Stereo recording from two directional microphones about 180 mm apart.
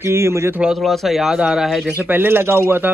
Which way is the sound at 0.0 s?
15° right (ahead or behind).